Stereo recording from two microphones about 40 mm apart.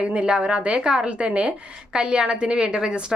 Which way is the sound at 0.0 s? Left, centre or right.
Right.